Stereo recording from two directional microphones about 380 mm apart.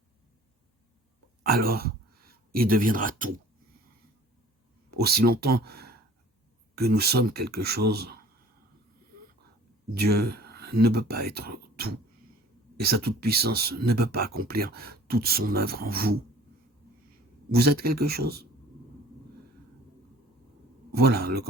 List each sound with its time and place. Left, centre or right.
1.5 s speech: right
4.9 s speech: right
9.9 s speech: right
17.5 s speech: right
20.9 s speech: right